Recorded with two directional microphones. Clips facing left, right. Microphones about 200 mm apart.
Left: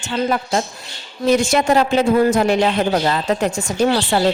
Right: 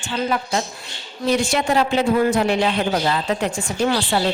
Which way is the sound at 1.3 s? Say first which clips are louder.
Left 4 dB; 45° left (ahead or behind).